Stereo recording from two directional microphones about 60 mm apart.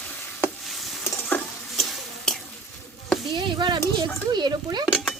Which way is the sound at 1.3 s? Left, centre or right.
Left.